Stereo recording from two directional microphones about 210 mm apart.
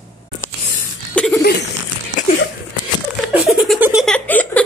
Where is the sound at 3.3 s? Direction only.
5° right (ahead or behind).